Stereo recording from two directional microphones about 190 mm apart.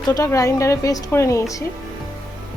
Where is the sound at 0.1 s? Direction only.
15° left (ahead or behind).